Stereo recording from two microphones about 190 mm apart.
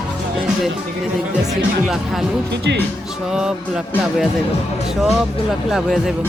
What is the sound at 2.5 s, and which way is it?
Speech, 65° right (ahead or behind).